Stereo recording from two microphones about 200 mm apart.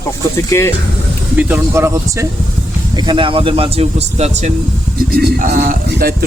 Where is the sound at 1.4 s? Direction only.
10° right (ahead or behind).